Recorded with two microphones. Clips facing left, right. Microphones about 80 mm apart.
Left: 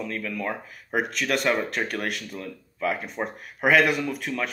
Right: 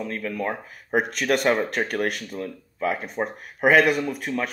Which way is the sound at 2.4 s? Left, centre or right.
Right.